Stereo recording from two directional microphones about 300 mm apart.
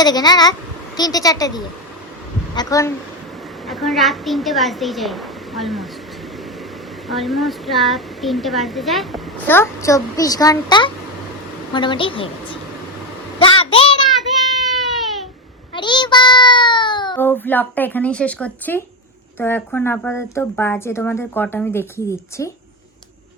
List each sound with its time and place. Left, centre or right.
0.0 s speech: centre
3.7 s speech: centre
7.1 s a child's voice: centre
14.9 s baby cry: centre
15.7 s a child's voice: centre